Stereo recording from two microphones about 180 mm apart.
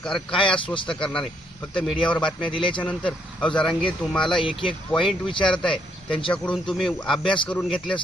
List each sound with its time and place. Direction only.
0.0 s speech: 5° left (ahead or behind)
0.3 s speech: 25° left (ahead or behind)
1.0 s speech: 5° left (ahead or behind)
2.5 s speech: 30° left (ahead or behind)
2.8 s speech: 5° left (ahead or behind)
4.3 s speech: 25° left (ahead or behind)
4.9 s speech: centre (ahead or behind)